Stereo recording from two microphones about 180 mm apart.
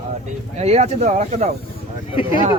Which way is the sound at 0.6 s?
35° right (ahead or behind).